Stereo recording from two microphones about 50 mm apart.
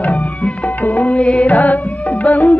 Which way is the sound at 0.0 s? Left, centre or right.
Left.